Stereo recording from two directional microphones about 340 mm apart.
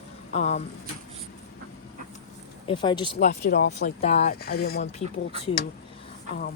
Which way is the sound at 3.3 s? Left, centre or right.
Left.